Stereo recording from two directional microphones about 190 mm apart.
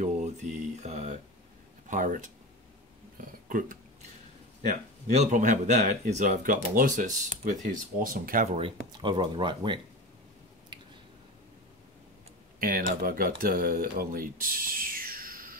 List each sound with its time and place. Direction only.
0.0 s mantra: 40° right (ahead or behind)
1.9 s speech: 40° right (ahead or behind)
3.4 s speech: 45° right (ahead or behind)
8.5 s speech: 25° right (ahead or behind)
10.7 s a sound: 25° right (ahead or behind)
12.5 s speech: 50° right (ahead or behind)